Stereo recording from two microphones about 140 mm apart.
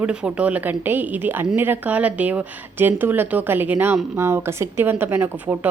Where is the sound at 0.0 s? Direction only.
5° right (ahead or behind).